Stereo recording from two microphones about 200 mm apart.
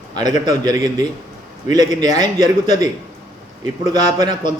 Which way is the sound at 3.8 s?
20° right (ahead or behind).